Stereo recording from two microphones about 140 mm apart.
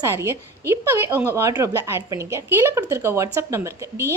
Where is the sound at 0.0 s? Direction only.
20° right (ahead or behind).